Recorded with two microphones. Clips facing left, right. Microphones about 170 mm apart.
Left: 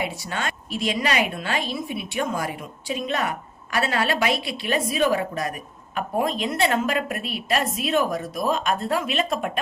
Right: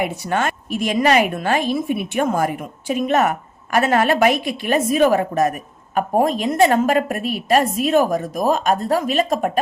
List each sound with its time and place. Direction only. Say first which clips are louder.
0.0 s a woman's voice: right 7 dB; 50° right (ahead or behind)